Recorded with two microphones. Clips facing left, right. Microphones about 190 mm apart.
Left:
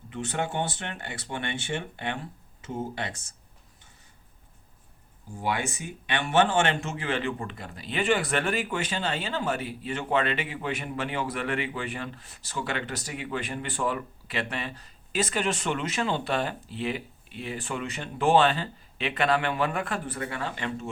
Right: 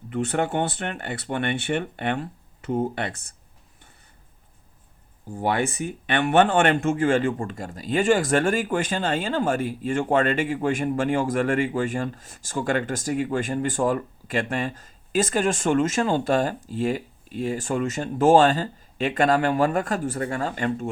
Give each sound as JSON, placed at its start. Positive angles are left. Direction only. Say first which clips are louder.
{"t": 0.1, "sound": "speech", "louder": "right 6 dB", "side_deg": -60}
{"t": 5.3, "sound": "speech", "louder": "right 6 dB", "side_deg": -50}